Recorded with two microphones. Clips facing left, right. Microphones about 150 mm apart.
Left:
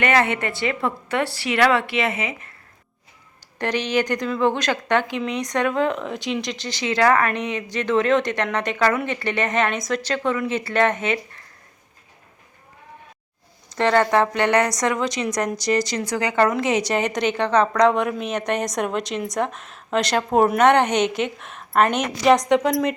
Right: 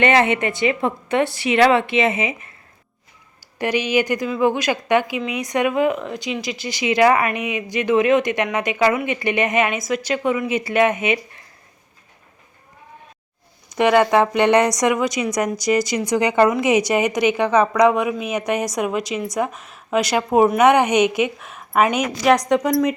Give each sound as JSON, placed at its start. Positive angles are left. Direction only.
{"t": 0.0, "sound": "a woman's voice", "side_deg": -20}
{"t": 3.6, "sound": "a woman's voice", "side_deg": -10}
{"t": 13.7, "sound": "a woman's voice", "side_deg": -15}